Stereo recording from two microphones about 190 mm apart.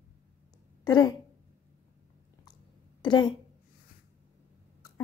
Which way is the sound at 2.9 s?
25° left (ahead or behind).